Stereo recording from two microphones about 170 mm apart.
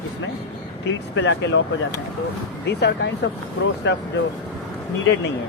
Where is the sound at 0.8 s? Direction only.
90° left.